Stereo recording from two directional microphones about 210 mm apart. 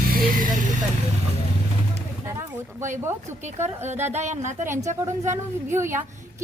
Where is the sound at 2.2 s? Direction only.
15° right (ahead or behind).